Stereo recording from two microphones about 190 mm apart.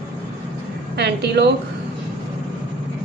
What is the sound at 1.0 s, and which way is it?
Speech, 60° right (ahead or behind).